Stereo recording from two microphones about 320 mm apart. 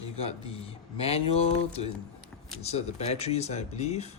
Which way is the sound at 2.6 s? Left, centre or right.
Centre.